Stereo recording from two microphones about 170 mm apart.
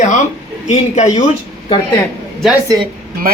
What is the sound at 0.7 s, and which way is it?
Speech, 45° left (ahead or behind).